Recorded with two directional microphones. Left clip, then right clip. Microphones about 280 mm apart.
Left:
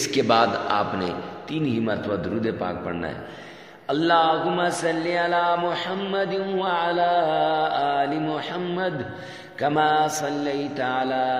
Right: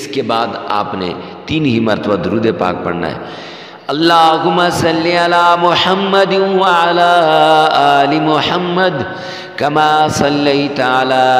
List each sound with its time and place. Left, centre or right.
0.1 s a man's voice: centre; by 11.3 s right